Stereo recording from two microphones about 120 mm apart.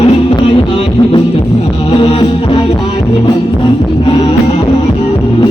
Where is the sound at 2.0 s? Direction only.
55° left (ahead or behind).